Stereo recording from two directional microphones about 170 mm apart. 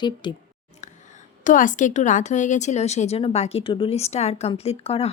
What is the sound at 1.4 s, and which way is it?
A woman's voice, 50° left (ahead or behind).